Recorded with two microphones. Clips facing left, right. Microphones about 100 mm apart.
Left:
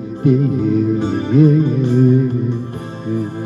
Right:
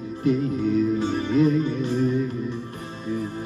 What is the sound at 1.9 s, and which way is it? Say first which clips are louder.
Music: left 11 dB; 50° left (ahead or behind).